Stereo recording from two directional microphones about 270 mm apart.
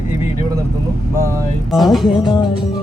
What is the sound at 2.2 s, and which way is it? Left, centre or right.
Music, centre.